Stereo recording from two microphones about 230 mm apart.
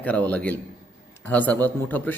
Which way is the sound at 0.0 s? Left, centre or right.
Centre.